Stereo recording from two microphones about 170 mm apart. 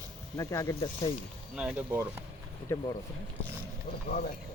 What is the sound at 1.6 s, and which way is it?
Speech, 10° right (ahead or behind).